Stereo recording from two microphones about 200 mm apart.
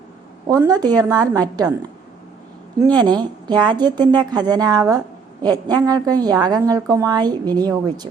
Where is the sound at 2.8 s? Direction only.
20° right (ahead or behind).